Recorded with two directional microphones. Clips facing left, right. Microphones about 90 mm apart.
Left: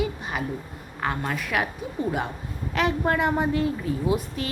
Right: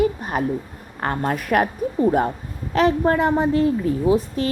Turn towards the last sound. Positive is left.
turn(degrees=-35)  # may be behind; listen again after turning